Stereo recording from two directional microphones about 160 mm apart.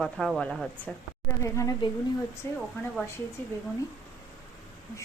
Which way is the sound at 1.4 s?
20° left (ahead or behind).